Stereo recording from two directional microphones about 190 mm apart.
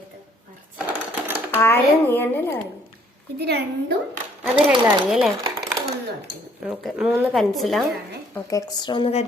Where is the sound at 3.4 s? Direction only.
60° right (ahead or behind).